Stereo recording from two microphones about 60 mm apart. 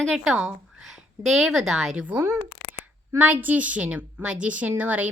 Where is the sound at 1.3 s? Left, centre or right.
Centre.